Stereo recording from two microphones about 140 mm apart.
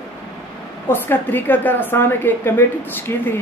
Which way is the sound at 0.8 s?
15° left (ahead or behind).